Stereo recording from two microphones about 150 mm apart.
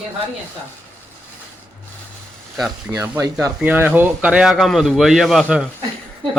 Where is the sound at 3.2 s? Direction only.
20° right (ahead or behind).